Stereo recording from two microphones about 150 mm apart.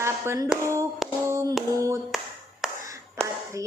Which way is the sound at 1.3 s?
20° right (ahead or behind).